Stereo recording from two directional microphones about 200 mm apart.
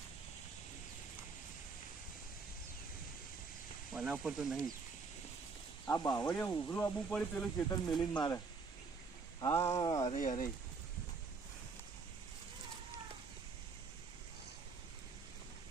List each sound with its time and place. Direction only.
3.9 s speech: 5° right (ahead or behind)
5.9 s speech: 15° left (ahead or behind)
9.4 s speech: 15° left (ahead or behind)
10.0 s speech: 35° left (ahead or behind)